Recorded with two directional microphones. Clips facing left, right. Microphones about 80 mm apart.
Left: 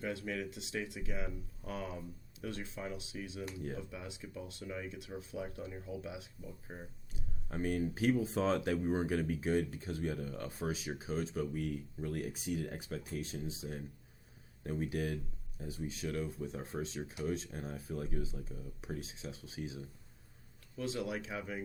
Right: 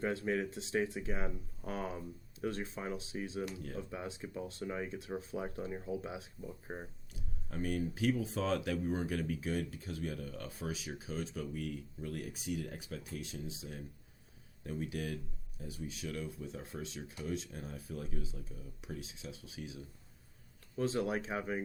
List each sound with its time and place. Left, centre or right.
0.0 s speech: right
7.5 s speech: left
20.7 s speech: right